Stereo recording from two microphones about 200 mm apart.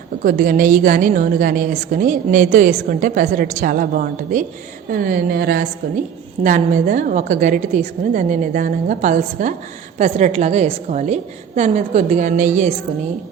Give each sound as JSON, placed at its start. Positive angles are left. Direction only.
{"t": 0.2, "sound": "a woman's voice", "side_deg": -45}